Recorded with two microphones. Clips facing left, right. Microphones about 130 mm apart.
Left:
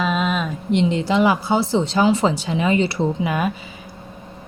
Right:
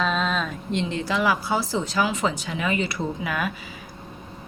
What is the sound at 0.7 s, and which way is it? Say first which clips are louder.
Speech: left 8 dB; 20° left (ahead or behind).